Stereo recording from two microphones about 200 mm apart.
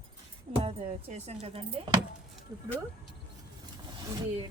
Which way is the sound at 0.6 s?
30° right (ahead or behind).